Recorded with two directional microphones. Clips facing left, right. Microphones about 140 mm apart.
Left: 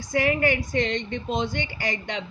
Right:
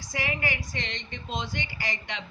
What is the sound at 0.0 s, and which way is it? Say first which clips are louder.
A woman's voice: left 9 dB; 55° left (ahead or behind).